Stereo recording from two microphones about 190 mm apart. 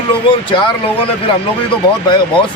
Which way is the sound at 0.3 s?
25° left (ahead or behind).